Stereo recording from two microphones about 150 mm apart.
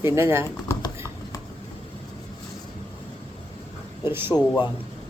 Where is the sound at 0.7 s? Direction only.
20° left (ahead or behind).